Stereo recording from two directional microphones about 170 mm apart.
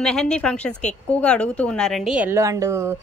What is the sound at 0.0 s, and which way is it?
A woman's voice, 5° left (ahead or behind).